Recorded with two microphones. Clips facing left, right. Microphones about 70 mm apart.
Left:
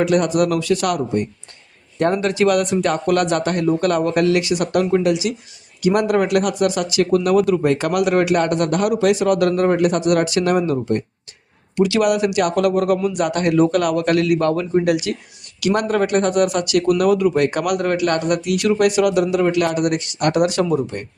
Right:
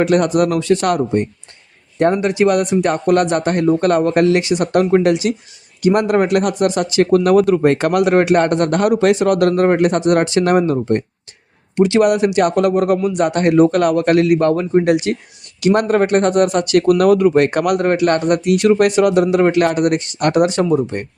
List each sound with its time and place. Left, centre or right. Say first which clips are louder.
0.0 s speech: right 3 dB; right